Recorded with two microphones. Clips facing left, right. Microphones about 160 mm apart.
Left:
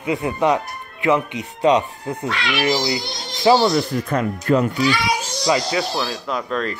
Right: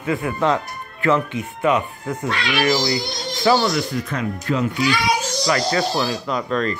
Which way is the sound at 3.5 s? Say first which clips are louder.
Left 3 dB; 35° left (ahead or behind).